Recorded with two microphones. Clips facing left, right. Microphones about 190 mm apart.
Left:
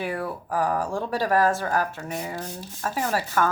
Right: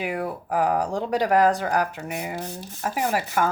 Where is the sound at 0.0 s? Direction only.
20° right (ahead or behind).